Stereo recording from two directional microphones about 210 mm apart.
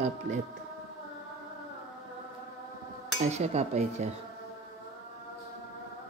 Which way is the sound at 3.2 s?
30° right (ahead or behind).